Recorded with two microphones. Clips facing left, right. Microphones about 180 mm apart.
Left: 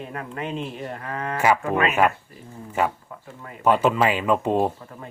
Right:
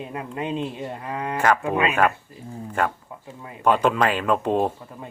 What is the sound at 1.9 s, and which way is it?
Speech, 10° left (ahead or behind).